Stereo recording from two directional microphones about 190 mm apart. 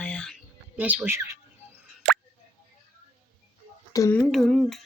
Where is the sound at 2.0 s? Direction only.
5° left (ahead or behind).